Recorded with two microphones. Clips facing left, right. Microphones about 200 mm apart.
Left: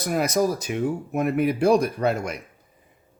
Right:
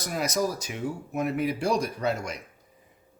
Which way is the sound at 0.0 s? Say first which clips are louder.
Left 6 dB; 55° left (ahead or behind).